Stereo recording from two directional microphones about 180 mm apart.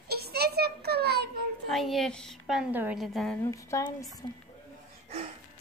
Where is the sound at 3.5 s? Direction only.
15° left (ahead or behind).